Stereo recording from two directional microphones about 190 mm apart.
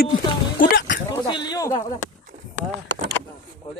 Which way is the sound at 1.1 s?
25° left (ahead or behind).